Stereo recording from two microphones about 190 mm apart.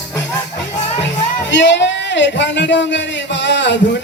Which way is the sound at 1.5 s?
70° left (ahead or behind).